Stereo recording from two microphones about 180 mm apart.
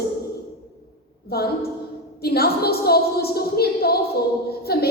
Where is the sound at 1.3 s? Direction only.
60° left (ahead or behind).